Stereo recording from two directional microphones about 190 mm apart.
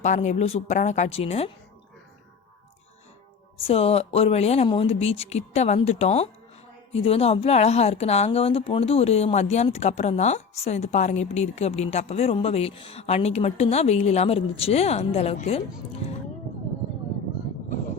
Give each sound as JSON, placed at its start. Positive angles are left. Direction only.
{"t": 0.0, "sound": "a woman's voice", "side_deg": 40}
{"t": 3.6, "sound": "a woman's voice", "side_deg": 30}